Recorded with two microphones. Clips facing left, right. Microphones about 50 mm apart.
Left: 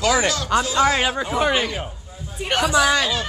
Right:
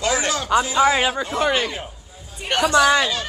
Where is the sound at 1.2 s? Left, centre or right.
Centre.